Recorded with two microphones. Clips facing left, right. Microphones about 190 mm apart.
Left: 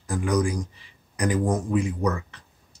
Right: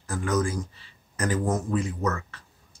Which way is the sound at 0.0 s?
15° left (ahead or behind).